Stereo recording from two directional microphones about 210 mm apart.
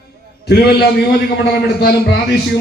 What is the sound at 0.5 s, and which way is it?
A man's voice, 50° left (ahead or behind).